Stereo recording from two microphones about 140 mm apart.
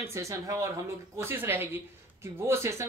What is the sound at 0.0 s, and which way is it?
Speech, 20° right (ahead or behind).